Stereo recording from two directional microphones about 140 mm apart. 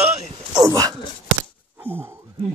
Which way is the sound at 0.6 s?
25° right (ahead or behind).